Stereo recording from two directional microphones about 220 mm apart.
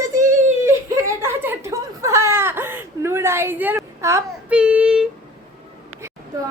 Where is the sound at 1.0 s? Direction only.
10° right (ahead or behind).